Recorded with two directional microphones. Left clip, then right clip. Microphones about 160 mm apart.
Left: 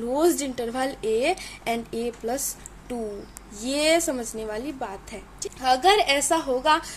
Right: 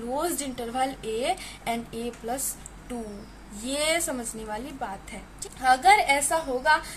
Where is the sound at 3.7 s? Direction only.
40° left (ahead or behind).